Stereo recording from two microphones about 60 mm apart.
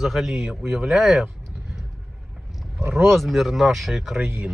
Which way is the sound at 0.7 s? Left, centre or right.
Centre.